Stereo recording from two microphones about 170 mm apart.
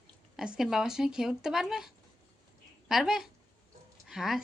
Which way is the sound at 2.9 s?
Centre (ahead or behind).